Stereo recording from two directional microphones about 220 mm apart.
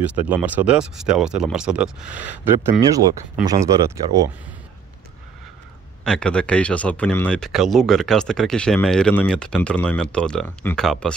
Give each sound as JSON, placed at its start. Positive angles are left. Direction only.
{"t": 0.1, "sound": "speech", "side_deg": -5}
{"t": 6.0, "sound": "speech", "side_deg": 5}